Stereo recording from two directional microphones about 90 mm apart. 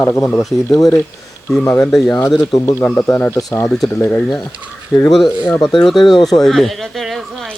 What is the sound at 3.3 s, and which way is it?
Speech, 40° left (ahead or behind).